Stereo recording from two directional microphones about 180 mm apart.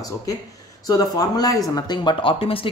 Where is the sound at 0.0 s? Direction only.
20° left (ahead or behind).